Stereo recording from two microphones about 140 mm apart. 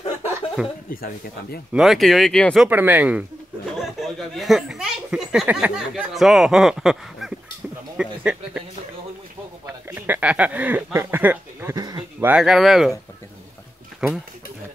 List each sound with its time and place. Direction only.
0.6 s speech: 5° right (ahead or behind)
2.7 s speech: 15° right (ahead or behind)
9.7 s speech: 15° right (ahead or behind)
11.7 s a sound: 25° right (ahead or behind)
12.3 s speech: 5° right (ahead or behind)
14.0 s speech: 5° right (ahead or behind)